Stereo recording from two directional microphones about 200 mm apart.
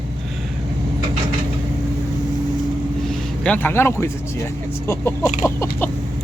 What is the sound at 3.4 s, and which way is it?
Speech, 10° left (ahead or behind).